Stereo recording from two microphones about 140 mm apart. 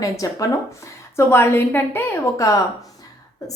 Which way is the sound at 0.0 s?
25° left (ahead or behind).